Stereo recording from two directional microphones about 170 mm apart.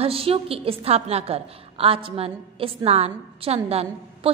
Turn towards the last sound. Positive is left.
turn(degrees=-35)  # may be behind; listen again after turning